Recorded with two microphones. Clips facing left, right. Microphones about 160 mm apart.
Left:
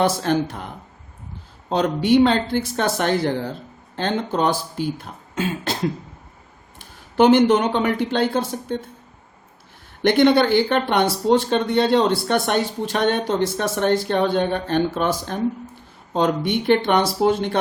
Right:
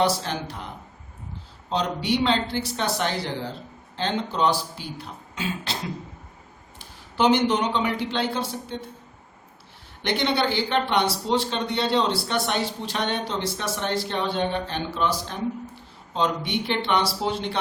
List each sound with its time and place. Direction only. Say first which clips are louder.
0.0 s speech: left 5 dB; 50° left (ahead or behind)
1.7 s speech: left 8 dB; 50° left (ahead or behind)
10.0 s speech: left 9 dB; 50° left (ahead or behind)